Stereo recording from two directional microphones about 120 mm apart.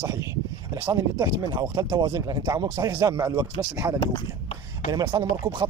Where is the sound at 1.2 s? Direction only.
30° right (ahead or behind).